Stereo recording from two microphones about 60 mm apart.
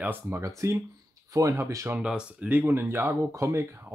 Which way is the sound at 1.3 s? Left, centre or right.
Right.